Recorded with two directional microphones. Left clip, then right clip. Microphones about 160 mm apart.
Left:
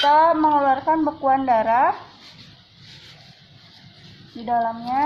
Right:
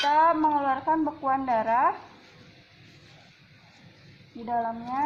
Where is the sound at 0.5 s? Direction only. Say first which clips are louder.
Left 7 dB; 40° left (ahead or behind).